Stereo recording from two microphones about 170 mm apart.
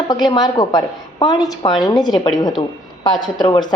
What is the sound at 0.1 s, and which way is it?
A woman's voice, 25° left (ahead or behind).